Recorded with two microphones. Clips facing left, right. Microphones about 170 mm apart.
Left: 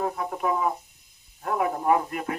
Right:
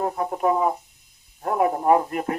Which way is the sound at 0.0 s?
40° right (ahead or behind).